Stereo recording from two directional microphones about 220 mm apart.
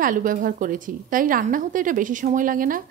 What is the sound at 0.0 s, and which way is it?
A woman's voice, 40° right (ahead or behind).